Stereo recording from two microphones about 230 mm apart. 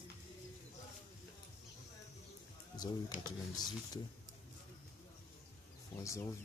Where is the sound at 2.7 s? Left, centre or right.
Centre.